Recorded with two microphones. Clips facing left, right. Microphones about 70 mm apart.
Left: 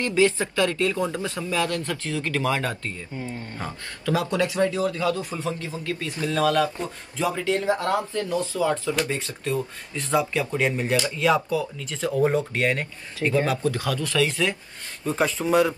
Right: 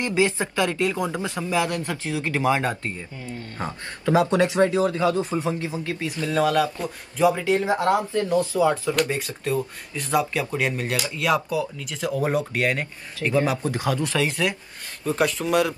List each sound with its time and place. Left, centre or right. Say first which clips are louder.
0.0 s speech: left 1 dB; centre
3.2 s speech: left 2 dB; left
3.5 s speech: right 2 dB; right
9.1 s speech: right 2 dB; centre; by 14.3 s right
15.0 s speech: even; centre